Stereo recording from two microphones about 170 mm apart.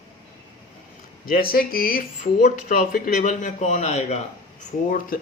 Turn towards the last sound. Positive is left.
turn(degrees=55)  # may be behind; listen again after turning